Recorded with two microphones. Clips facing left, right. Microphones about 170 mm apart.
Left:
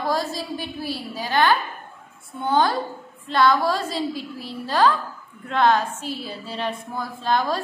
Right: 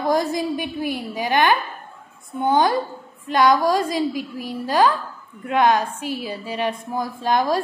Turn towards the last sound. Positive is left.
turn(degrees=-10)  # may be behind; listen again after turning